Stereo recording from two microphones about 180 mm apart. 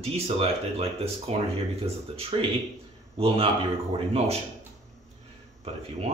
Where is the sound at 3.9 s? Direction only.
35° right (ahead or behind).